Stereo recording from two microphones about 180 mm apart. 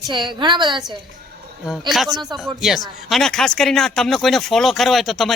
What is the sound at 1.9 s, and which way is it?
Speech, centre (ahead or behind).